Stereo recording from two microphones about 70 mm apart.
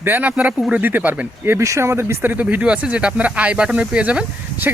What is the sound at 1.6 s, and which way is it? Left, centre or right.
Speech, right.